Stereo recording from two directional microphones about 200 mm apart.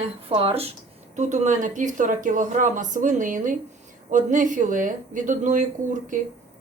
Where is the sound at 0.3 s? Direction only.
30° right (ahead or behind).